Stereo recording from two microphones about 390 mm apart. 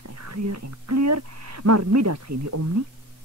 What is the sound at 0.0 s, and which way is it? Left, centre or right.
Speech, right.